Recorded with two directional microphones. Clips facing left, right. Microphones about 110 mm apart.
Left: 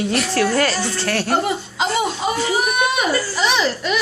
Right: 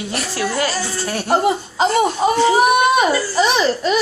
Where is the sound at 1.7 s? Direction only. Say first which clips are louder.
Right 4 dB; 45° right (ahead or behind).